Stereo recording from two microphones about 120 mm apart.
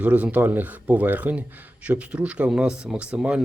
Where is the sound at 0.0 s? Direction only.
10° right (ahead or behind).